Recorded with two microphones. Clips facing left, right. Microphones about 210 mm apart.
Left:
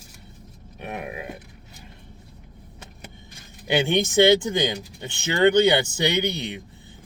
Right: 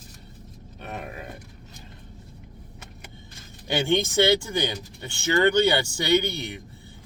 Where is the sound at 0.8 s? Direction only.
15° left (ahead or behind).